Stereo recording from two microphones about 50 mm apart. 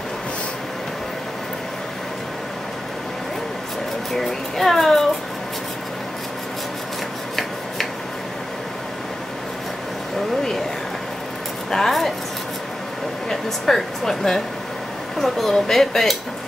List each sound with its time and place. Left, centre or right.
4.1 s a child's voice: centre
11.7 s speech: centre
13.3 s speech: centre